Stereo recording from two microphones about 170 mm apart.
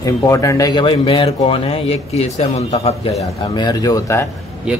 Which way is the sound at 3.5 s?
25° left (ahead or behind).